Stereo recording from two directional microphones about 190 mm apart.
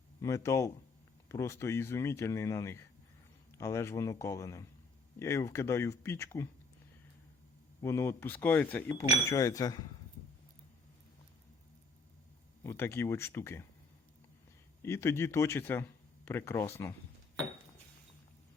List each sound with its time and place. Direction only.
0.2 s speech: 15° left (ahead or behind)
7.8 s speech: 15° left (ahead or behind)
12.6 s speech: 15° left (ahead or behind)
14.8 s a man's voice: 15° left (ahead or behind)